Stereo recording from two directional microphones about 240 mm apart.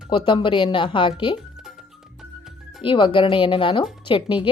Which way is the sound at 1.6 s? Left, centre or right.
Centre.